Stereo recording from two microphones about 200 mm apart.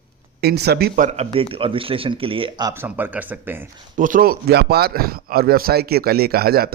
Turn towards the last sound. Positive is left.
turn(degrees=-50)  # may be behind; listen again after turning